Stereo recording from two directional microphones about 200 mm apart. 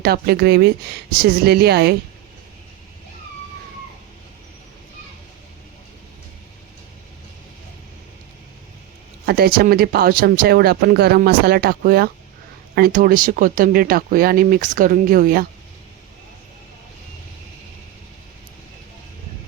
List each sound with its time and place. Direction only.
0.0 s speech: 50° right (ahead or behind)
9.2 s speech: 50° right (ahead or behind)